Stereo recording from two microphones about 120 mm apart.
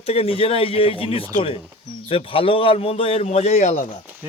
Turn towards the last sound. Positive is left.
turn(degrees=70)  # may be behind; listen again after turning